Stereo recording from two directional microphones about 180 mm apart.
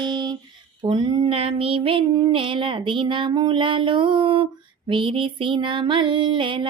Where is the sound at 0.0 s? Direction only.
25° right (ahead or behind).